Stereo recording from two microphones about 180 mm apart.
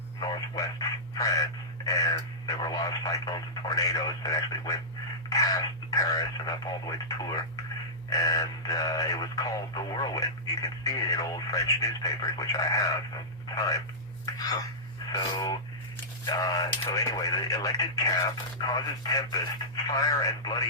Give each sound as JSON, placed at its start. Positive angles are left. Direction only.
{"t": 0.2, "sound": "speech", "side_deg": 20}